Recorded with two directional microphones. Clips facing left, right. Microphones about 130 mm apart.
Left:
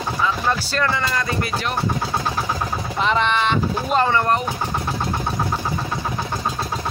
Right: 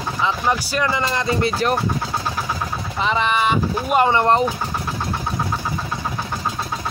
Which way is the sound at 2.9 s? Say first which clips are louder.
Even; centre (ahead or behind).